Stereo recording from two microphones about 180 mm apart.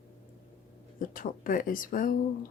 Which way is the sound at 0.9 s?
50° left (ahead or behind).